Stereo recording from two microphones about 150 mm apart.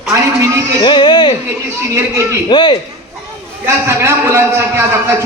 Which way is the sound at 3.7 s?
20° right (ahead or behind).